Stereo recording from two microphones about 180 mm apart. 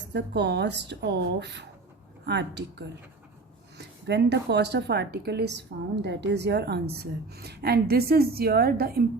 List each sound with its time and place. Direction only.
0.1 s a woman's voice: 70° right (ahead or behind)
6.0 s a woman's voice: 75° right (ahead or behind); by 9.0 s 60° right (ahead or behind)